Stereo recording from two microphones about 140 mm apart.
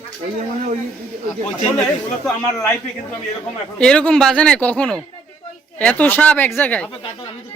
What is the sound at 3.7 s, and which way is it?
Speech, 5° left (ahead or behind).